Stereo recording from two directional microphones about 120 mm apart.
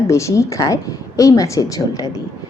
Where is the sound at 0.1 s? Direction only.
25° left (ahead or behind).